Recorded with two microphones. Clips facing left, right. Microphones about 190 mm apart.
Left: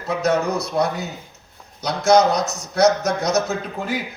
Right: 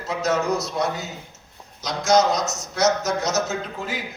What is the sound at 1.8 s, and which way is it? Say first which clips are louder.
Speech: left 4 dB; 60° left (ahead or behind).